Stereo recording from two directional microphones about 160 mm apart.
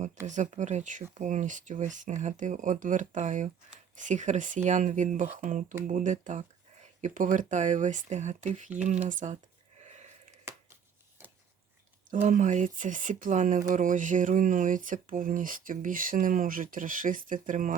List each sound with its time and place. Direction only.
0.3 s speech: 50° right (ahead or behind)
9.8 s a sound: 45° right (ahead or behind)
12.1 s speech: 55° right (ahead or behind)